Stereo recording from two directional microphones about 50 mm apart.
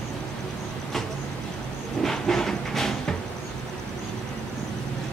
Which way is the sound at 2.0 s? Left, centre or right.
Centre.